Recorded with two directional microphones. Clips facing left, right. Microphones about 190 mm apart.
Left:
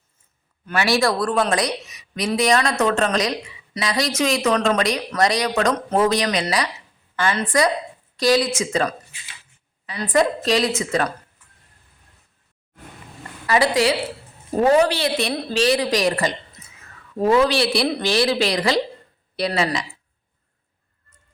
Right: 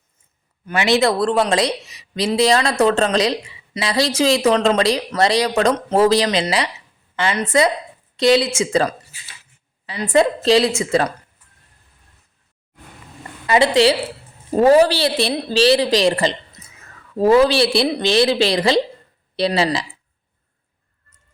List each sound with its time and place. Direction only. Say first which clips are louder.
0.6 s speech: right 3 dB; 20° right (ahead or behind)
13.5 s a woman's voice: right 4 dB; 25° right (ahead or behind)
16.6 s a sound: right 2 dB; 30° right (ahead or behind)
17.2 s speech: right 4 dB; 35° right (ahead or behind)